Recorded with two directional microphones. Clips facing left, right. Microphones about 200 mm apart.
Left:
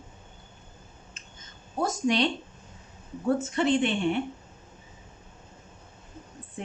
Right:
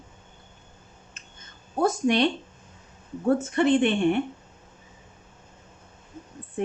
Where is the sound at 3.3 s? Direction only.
55° right (ahead or behind).